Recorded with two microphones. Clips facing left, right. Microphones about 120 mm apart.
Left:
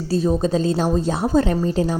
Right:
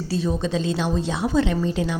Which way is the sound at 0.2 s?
40° left (ahead or behind).